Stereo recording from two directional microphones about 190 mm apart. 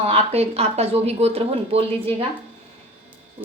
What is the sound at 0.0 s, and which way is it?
Speech, 30° right (ahead or behind).